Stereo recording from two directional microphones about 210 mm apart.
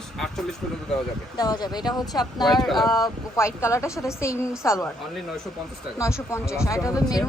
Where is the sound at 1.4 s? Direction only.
20° left (ahead or behind).